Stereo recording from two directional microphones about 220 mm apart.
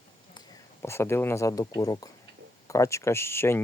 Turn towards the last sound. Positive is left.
turn(degrees=10)  # may be behind; listen again after turning